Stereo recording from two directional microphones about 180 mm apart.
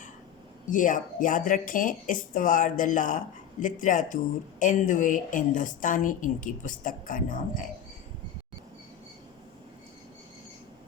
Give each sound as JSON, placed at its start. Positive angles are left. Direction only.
{"t": 0.7, "sound": "speech", "side_deg": 45}